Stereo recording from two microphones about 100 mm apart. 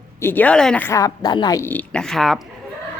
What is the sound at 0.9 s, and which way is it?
Speech, 35° left (ahead or behind).